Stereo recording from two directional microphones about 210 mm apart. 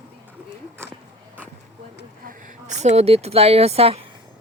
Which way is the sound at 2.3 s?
35° right (ahead or behind).